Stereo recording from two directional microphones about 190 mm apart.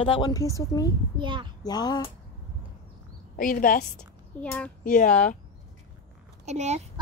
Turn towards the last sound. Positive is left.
turn(degrees=-35)  # may be behind; listen again after turning